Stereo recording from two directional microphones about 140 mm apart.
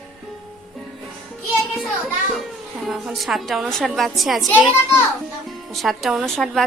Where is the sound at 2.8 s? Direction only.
Centre (ahead or behind).